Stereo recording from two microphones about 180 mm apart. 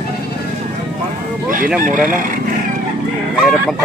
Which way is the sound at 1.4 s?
50° right (ahead or behind).